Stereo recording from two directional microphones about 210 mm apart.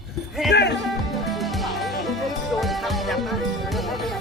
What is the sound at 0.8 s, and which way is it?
Music, centre (ahead or behind).